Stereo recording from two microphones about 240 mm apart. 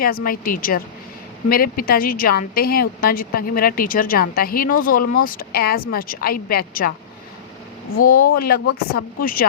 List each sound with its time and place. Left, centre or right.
0.0 s a woman's voice: left
7.9 s a woman's voice: left